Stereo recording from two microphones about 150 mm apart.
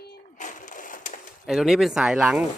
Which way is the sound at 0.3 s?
55° left (ahead or behind).